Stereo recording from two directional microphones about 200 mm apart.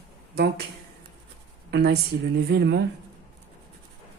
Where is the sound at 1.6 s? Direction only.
55° right (ahead or behind).